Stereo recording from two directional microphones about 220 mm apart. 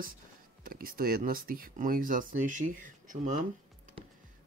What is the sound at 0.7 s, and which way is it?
Speech, 40° right (ahead or behind).